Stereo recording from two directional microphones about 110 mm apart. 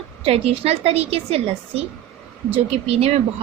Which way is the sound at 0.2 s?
65° right (ahead or behind).